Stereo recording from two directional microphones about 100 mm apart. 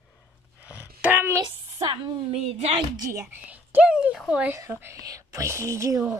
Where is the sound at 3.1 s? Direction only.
25° right (ahead or behind).